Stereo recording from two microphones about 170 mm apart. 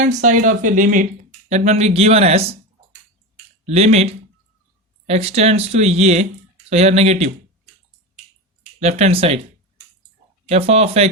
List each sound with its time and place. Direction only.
0.0 s speech: 45° right (ahead or behind)
3.7 s speech: 40° right (ahead or behind)
8.8 s speech: 40° right (ahead or behind)
10.5 s speech: 40° right (ahead or behind)